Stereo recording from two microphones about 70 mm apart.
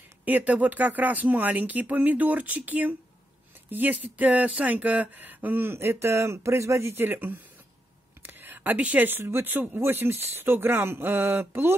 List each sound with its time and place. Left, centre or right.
0.2 s speech: right